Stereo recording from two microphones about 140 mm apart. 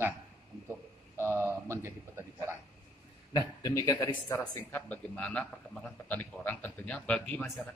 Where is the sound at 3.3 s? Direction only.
25° left (ahead or behind).